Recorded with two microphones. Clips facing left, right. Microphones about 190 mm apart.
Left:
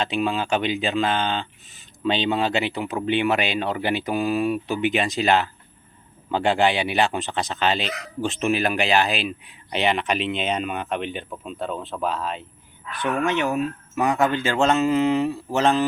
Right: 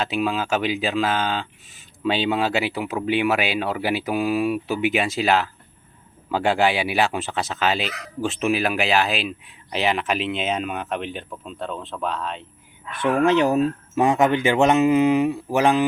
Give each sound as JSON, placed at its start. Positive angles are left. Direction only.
{"t": 0.0, "sound": "speech", "side_deg": -5}
{"t": 12.9, "sound": "speech", "side_deg": -30}